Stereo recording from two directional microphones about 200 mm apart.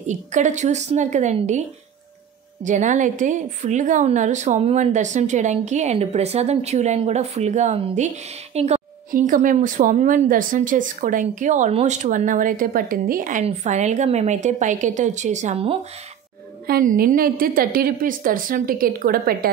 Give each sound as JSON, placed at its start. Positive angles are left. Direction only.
{"t": 0.0, "sound": "a woman's voice", "side_deg": -35}
{"t": 2.6, "sound": "a woman's voice", "side_deg": -40}
{"t": 16.6, "sound": "a woman's voice", "side_deg": -45}